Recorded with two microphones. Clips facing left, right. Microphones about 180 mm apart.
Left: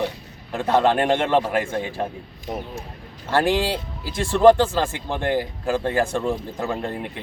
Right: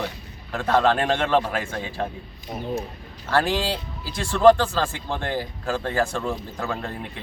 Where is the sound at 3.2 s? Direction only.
15° left (ahead or behind).